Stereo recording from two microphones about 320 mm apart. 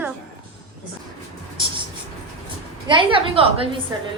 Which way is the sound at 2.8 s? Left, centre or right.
Centre.